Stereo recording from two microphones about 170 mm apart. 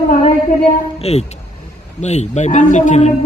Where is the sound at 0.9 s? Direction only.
40° left (ahead or behind).